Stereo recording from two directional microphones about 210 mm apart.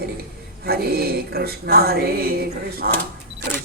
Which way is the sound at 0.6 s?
45° right (ahead or behind).